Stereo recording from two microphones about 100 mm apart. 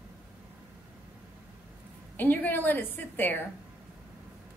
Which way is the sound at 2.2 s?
20° left (ahead or behind).